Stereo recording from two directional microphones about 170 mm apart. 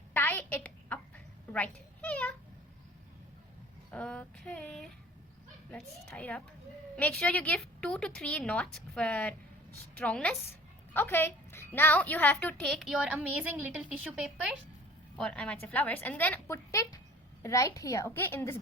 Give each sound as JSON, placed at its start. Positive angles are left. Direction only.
{"t": 0.1, "sound": "a sound", "side_deg": 10}
{"t": 3.9, "sound": "female singing", "side_deg": 5}
{"t": 5.7, "sound": "a woman's voice", "side_deg": 10}
{"t": 15.1, "sound": "a woman's voice", "side_deg": 5}